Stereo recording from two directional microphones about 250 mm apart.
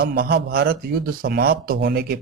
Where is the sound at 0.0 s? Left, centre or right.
Right.